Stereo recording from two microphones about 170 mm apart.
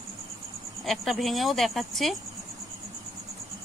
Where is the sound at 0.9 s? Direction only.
Centre (ahead or behind).